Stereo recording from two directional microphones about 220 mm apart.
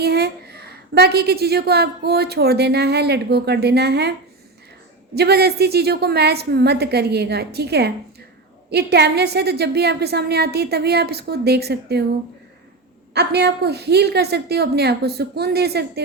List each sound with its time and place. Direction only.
0.0 s a woman's voice: 45° right (ahead or behind)
5.1 s a woman's voice: 45° right (ahead or behind)
13.1 s a woman's voice: 50° right (ahead or behind)